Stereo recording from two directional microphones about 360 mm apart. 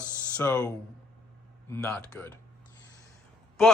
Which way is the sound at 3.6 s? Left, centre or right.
Centre.